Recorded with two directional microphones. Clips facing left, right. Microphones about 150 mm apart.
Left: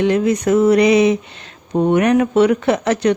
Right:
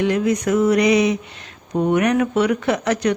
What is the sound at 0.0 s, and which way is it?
Speech, 30° left (ahead or behind).